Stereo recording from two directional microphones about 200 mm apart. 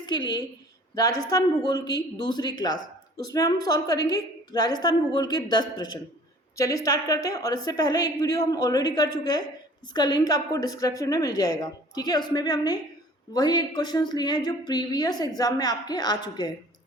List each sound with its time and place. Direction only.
0.0 s a woman's voice: 20° left (ahead or behind)